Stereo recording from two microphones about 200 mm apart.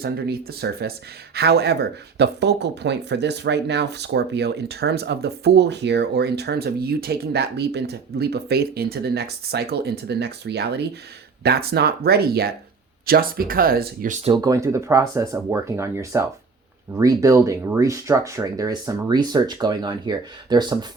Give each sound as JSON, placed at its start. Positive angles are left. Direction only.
{"t": 0.0, "sound": "speech", "side_deg": -50}
{"t": 14.4, "sound": "speech", "side_deg": -15}